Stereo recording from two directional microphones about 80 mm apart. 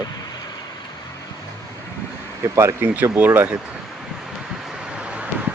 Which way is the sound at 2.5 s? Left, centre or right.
Right.